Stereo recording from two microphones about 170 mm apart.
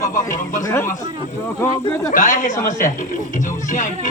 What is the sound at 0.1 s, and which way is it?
Speech, 50° left (ahead or behind).